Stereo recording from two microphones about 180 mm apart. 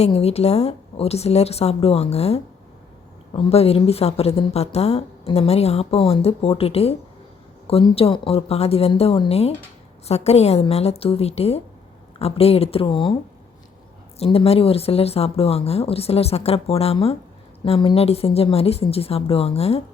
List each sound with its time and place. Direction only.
0.0 s speech: 35° left (ahead or behind)
14.2 s speech: 35° left (ahead or behind)